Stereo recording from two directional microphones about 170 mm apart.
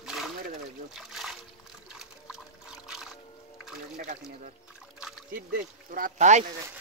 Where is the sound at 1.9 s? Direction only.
5° right (ahead or behind).